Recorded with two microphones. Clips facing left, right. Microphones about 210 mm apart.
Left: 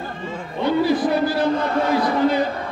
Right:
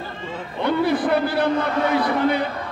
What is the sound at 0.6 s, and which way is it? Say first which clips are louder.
A man's voice: left 2 dB; 60° right (ahead or behind).